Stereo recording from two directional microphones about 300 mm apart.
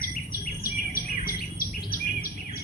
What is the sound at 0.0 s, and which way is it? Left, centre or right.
Bird, left.